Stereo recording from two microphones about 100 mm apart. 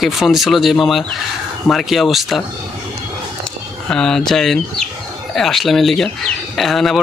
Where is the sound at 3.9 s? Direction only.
5° left (ahead or behind).